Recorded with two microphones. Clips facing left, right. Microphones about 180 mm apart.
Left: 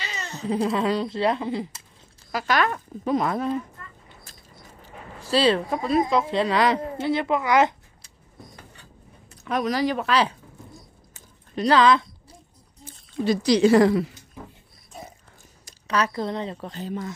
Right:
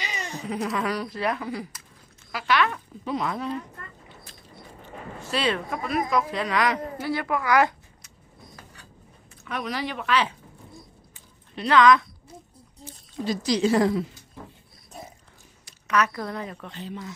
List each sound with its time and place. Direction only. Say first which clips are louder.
0.0 s cat: even; 15° right (ahead or behind)
0.5 s speech: left 5 dB; 30° left (ahead or behind)
2.3 s speech: left 1 dB; 40° left (ahead or behind)
4.8 s speech: right 2 dB; 35° left (ahead or behind)
9.4 s speech: left 7 dB; 40° left (ahead or behind)
11.1 s a sound: left 8 dB; 40° left (ahead or behind)
12.8 s speech: left 5 dB; 65° left (ahead or behind)
15.6 s a woman's voice: even; 30° left (ahead or behind)